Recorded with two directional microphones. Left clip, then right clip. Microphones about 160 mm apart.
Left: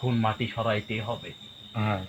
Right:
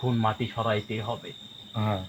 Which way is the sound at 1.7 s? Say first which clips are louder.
Even; 15° right (ahead or behind).